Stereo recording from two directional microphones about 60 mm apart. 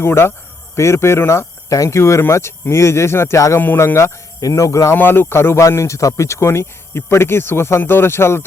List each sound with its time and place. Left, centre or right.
0.0 s speech: left
1.7 s speech: left
2.0 s speech: left
3.3 s speech: left
3.8 s speech: left
4.4 s speech: left
4.9 s speech: left
5.5 s speech: left